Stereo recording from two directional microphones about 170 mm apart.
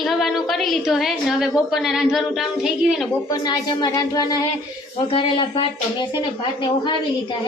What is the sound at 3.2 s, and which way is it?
A woman's voice, 25° left (ahead or behind).